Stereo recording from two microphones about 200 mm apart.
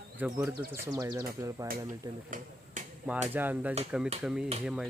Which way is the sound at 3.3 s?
10° right (ahead or behind).